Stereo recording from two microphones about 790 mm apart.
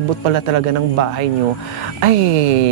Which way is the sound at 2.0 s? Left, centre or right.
Right.